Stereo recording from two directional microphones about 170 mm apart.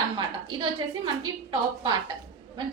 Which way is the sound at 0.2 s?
30° right (ahead or behind).